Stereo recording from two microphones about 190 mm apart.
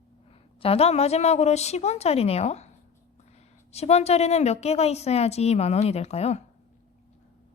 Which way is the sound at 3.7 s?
35° left (ahead or behind).